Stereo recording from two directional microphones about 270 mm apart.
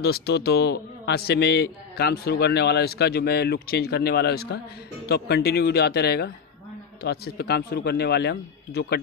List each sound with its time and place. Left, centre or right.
0.0 s a man's voice: left